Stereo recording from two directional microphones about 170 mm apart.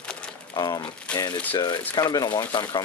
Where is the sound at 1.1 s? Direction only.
5° left (ahead or behind).